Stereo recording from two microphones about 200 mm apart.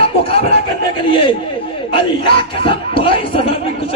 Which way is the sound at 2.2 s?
25° left (ahead or behind).